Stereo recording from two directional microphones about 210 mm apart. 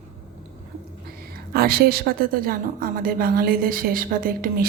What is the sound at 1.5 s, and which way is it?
A woman's voice, 45° right (ahead or behind).